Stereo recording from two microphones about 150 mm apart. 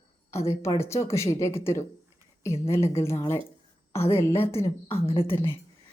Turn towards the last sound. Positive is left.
turn(degrees=40)  # may be behind; listen again after turning